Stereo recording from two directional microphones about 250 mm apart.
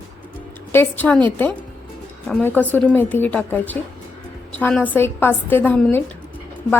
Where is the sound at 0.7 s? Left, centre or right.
Centre.